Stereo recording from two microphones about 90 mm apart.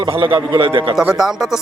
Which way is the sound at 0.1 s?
80° right.